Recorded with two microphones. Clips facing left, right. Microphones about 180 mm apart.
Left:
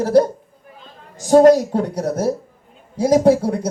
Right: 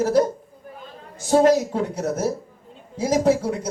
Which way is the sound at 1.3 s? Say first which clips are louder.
Left 6 dB; 35° left (ahead or behind).